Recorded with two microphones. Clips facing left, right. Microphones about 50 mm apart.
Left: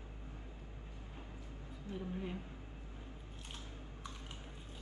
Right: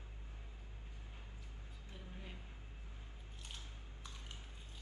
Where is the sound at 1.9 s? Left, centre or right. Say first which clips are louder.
Left 14 dB; left.